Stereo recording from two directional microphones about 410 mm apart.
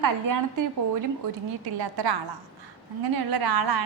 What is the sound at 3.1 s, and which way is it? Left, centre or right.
Speech, right.